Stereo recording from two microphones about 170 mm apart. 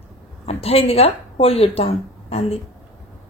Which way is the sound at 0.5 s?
35° left (ahead or behind).